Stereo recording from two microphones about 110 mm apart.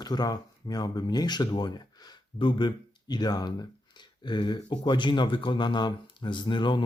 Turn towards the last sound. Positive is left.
turn(degrees=45)  # may be behind; listen again after turning